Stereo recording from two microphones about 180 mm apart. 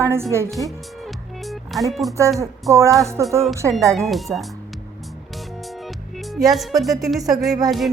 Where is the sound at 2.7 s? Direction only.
15° right (ahead or behind).